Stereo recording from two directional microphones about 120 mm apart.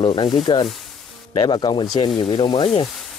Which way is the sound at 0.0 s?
50° left (ahead or behind).